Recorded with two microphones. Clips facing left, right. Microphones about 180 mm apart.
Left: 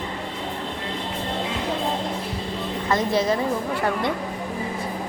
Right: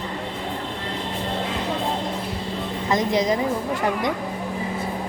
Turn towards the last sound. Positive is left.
turn(degrees=-15)  # may be behind; listen again after turning